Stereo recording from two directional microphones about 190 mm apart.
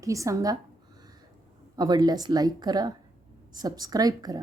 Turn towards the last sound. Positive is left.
turn(degrees=-20)  # may be behind; listen again after turning